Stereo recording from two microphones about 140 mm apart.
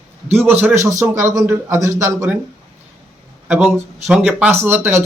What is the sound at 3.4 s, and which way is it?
Speech, 5° right (ahead or behind).